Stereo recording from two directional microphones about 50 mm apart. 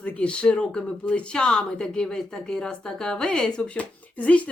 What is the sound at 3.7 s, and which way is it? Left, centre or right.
Speech, left.